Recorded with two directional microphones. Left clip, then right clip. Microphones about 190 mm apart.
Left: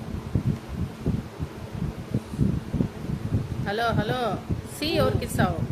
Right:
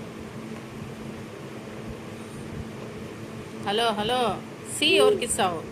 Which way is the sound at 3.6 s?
15° left (ahead or behind).